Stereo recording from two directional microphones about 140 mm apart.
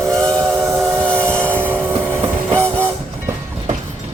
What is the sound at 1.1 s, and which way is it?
Vehicle, 10° left (ahead or behind).